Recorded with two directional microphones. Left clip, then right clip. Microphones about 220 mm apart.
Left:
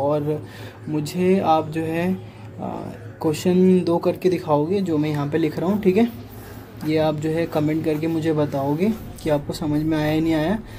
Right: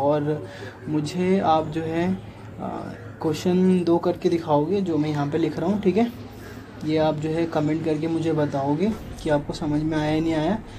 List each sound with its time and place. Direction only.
0.0 s a sound: 15° left (ahead or behind)
0.9 s speech: 20° left (ahead or behind)
3.2 s speech: 20° left (ahead or behind)